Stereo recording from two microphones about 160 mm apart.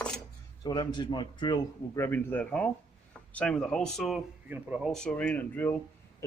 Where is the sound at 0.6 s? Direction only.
25° left (ahead or behind).